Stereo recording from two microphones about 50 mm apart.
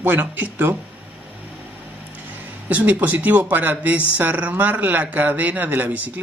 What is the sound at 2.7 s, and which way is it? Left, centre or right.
Speech, right.